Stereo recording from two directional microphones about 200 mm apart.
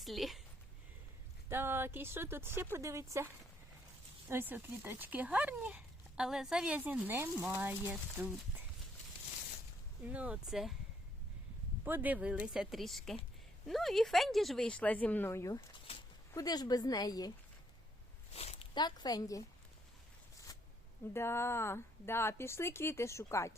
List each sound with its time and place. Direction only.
0.0 s speech: centre (ahead or behind)
1.5 s speech: 10° right (ahead or behind)
4.3 s speech: 10° right (ahead or behind)
10.1 s speech: 5° right (ahead or behind)
11.9 s a woman's voice: 10° right (ahead or behind); by 17.3 s 20° left (ahead or behind)
18.3 s speech: 30° left (ahead or behind)
20.5 s zipper: 20° left (ahead or behind)
21.1 s speech: 10° left (ahead or behind)